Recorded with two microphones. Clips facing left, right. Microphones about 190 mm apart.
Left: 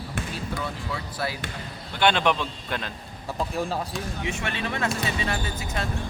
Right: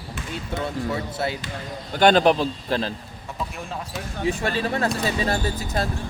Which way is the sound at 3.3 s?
35° left (ahead or behind).